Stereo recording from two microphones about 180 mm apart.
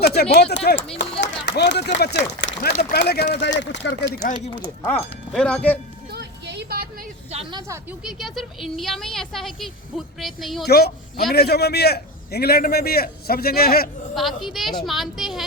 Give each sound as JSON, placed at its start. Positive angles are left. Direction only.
{"t": 0.0, "sound": "a man's voice", "side_deg": 65}
{"t": 2.5, "sound": "a man's voice", "side_deg": 50}
{"t": 3.6, "sound": "speech", "side_deg": 75}
{"t": 4.9, "sound": "speech", "side_deg": 5}
{"t": 6.1, "sound": "vehicle", "side_deg": -70}
{"t": 8.0, "sound": "speech", "side_deg": 0}
{"t": 10.7, "sound": "a man's voice", "side_deg": 65}
{"t": 14.2, "sound": "speech", "side_deg": 0}